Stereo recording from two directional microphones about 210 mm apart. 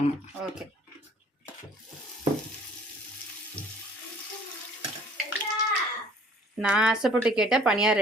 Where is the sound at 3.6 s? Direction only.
5° left (ahead or behind).